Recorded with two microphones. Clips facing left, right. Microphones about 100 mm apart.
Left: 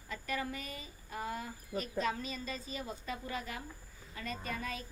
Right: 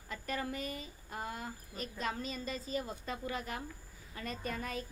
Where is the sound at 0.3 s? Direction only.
40° right (ahead or behind).